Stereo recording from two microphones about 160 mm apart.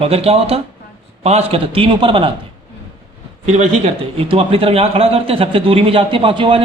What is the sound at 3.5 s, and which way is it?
A man's voice, 45° right (ahead or behind).